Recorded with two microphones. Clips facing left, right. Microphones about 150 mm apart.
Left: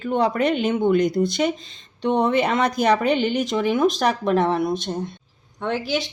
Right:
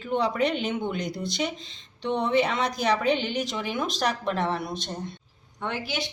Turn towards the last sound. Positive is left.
turn(degrees=90)